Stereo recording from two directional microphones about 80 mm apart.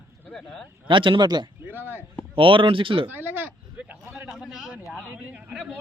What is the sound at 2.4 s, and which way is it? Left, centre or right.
Speech, right.